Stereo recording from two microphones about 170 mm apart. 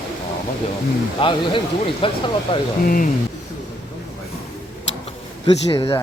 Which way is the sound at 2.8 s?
55° left (ahead or behind).